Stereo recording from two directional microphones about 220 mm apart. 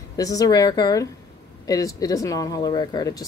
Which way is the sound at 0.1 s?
15° left (ahead or behind).